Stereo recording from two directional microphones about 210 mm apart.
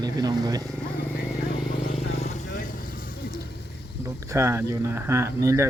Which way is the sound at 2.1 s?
30° left (ahead or behind).